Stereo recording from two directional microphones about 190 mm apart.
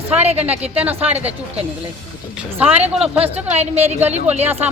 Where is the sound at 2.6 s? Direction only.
10° right (ahead or behind).